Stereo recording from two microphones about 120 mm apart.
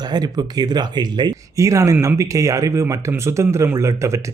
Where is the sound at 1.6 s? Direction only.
25° right (ahead or behind).